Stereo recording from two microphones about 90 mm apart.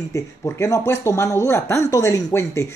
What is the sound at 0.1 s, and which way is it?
Speech, 35° left (ahead or behind).